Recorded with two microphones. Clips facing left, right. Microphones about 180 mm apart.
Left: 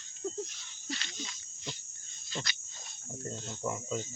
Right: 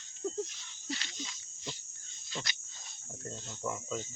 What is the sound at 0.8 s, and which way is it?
Speech, 25° right (ahead or behind).